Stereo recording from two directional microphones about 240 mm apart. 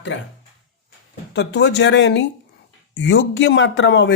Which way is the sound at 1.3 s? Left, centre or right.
Left.